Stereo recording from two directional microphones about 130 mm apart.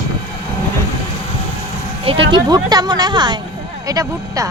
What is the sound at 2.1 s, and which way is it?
Speech, 45° right (ahead or behind).